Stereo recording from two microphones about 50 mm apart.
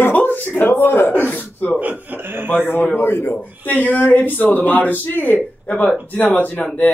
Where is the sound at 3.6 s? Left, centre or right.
Left.